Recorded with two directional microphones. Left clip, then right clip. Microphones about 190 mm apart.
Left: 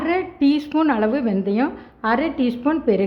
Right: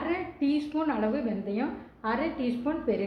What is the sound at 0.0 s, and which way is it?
Speech, 50° left (ahead or behind).